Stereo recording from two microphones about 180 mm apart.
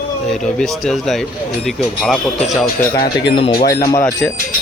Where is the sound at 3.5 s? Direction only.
55° left (ahead or behind).